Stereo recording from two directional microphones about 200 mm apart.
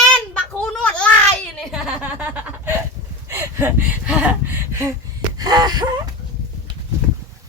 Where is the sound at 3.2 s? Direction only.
15° right (ahead or behind).